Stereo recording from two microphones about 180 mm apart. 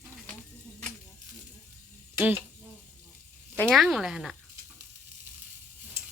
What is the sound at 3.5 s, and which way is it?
Speech, 5° left (ahead or behind).